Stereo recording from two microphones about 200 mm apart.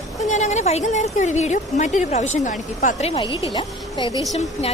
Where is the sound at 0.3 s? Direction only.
35° left (ahead or behind).